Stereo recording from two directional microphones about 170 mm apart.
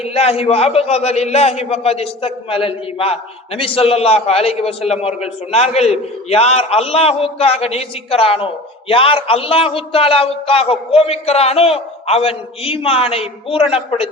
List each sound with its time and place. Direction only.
0.0 s a man's voice: 35° left (ahead or behind)